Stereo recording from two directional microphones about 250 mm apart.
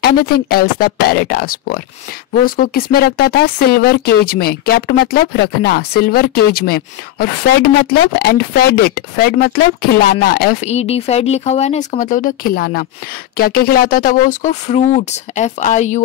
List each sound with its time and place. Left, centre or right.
0.3 s speech: left